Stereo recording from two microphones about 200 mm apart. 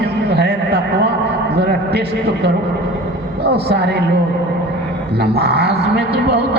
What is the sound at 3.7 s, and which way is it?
Speech, 55° right (ahead or behind).